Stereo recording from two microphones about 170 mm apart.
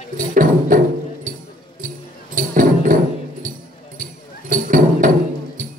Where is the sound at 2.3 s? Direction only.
50° right (ahead or behind).